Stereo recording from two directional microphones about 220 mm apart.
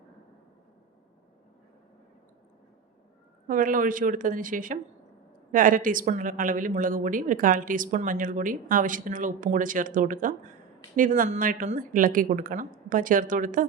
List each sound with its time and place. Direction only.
3.4 s a woman's voice: 40° right (ahead or behind)